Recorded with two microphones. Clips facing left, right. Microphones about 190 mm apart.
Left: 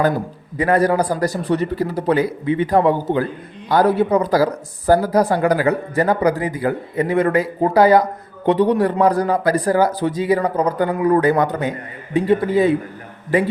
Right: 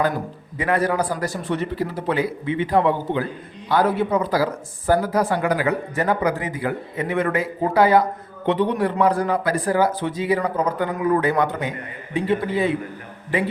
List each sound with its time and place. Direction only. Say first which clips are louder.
0.5 s a man's voice: left 5 dB; 40° left (ahead or behind)